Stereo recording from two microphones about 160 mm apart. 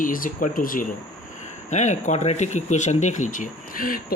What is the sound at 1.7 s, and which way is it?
Speech, 45° left (ahead or behind).